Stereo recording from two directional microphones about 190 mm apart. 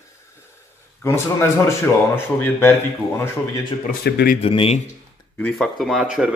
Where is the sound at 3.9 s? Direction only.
55° left (ahead or behind).